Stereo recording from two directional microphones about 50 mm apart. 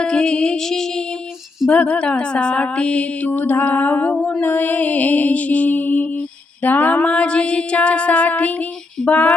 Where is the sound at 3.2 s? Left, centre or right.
Left.